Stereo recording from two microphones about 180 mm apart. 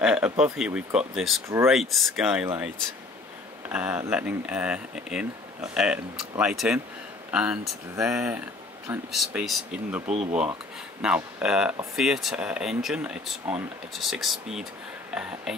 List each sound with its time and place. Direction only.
0.0 s speech: 5° right (ahead or behind)
10.0 s speech: 40° right (ahead or behind)
11.0 s speech: 5° right (ahead or behind)